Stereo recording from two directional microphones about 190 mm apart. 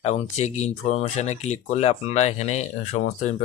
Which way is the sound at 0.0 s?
35° left (ahead or behind).